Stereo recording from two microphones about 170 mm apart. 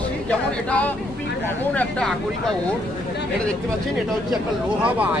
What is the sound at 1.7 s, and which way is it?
Speech, 5° left (ahead or behind).